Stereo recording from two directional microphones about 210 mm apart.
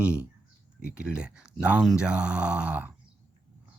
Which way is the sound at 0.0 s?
5° right (ahead or behind).